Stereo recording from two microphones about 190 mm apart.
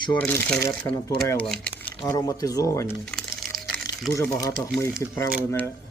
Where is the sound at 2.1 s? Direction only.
20° left (ahead or behind).